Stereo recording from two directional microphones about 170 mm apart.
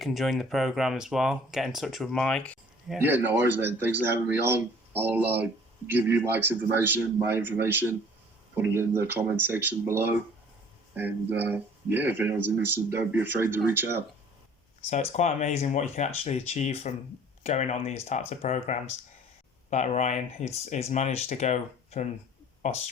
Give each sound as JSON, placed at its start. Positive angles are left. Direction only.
{"t": 0.0, "sound": "speech", "side_deg": 0}
{"t": 3.0, "sound": "speech", "side_deg": -10}
{"t": 14.8, "sound": "speech", "side_deg": 45}